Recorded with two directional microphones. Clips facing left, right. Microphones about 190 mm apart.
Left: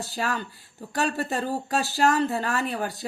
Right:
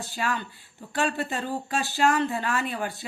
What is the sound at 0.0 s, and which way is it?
Speech, 40° left (ahead or behind).